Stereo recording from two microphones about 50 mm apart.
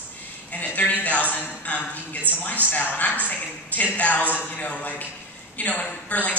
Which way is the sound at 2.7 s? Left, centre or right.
Left.